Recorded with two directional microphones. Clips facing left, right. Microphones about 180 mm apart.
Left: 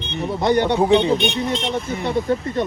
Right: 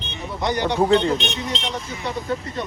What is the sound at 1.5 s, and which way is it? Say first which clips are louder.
Speech: left 6 dB; 55° left (ahead or behind).